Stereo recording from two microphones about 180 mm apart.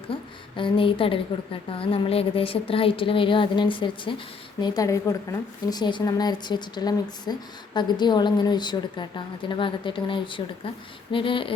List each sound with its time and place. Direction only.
0.1 s speech: 30° left (ahead or behind)